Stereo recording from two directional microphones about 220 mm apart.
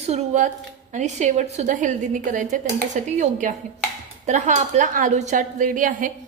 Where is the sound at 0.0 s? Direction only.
30° right (ahead or behind).